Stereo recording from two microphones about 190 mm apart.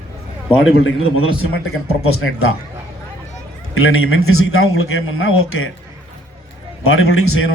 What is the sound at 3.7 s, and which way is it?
A man's voice, 90° left.